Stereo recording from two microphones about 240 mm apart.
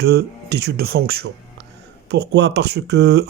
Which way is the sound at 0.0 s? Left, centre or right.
Right.